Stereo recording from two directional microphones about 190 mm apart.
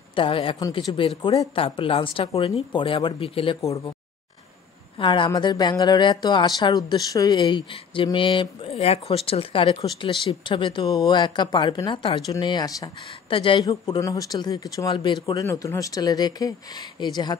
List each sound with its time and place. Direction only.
0.1 s speech: 25° left (ahead or behind)
3.6 s speech: 15° left (ahead or behind)
4.9 s speech: 25° left (ahead or behind)